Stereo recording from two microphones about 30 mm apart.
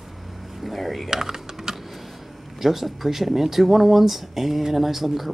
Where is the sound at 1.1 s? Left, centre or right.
Centre.